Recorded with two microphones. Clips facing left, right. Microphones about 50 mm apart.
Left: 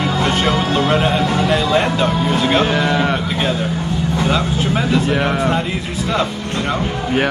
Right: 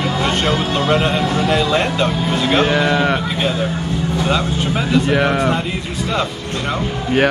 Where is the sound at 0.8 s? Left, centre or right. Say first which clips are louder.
Left 1 dB; centre.